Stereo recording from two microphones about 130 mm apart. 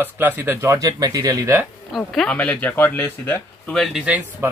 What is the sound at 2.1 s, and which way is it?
Speech, 5° left (ahead or behind).